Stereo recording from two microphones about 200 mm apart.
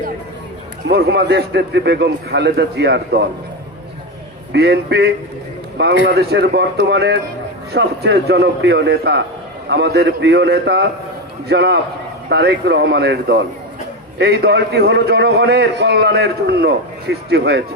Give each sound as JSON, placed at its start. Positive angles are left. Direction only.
{"t": 0.9, "sound": "a man's voice", "side_deg": -55}
{"t": 4.5, "sound": "a man's voice", "side_deg": -55}